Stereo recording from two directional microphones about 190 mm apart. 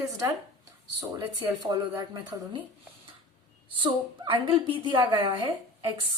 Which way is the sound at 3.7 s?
25° right (ahead or behind).